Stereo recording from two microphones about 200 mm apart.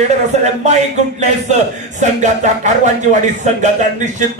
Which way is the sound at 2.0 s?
35° right (ahead or behind).